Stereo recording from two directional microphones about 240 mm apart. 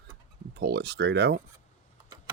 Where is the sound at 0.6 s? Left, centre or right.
Right.